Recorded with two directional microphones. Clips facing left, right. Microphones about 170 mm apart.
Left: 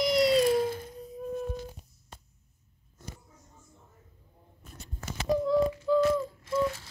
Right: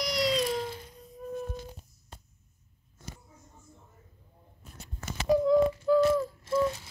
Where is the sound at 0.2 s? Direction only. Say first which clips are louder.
Left 4 dB; 50° left (ahead or behind).